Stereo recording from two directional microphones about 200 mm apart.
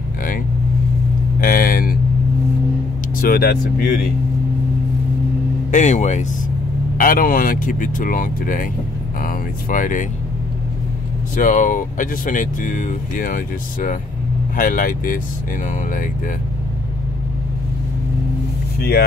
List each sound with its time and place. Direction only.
1.4 s a sound: 45° left (ahead or behind)
3.2 s speech: 50° left (ahead or behind)
5.7 s speech: 35° left (ahead or behind)
11.4 s speech: 40° left (ahead or behind)
18.8 s speech: 50° left (ahead or behind)